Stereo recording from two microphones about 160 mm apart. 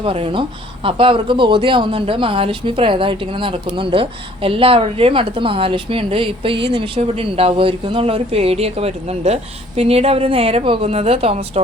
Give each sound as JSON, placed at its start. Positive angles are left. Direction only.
{"t": 0.0, "sound": "a woman's voice", "side_deg": -35}